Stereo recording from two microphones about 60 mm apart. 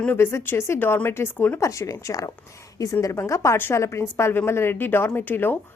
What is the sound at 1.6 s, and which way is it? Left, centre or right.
A woman's voice, left.